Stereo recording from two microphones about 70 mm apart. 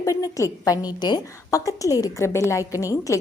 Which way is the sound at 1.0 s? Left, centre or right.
Left.